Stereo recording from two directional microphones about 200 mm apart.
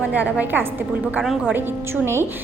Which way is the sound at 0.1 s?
5° right (ahead or behind).